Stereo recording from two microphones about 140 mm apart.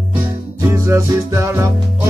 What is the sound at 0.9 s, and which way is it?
Music, 20° right (ahead or behind).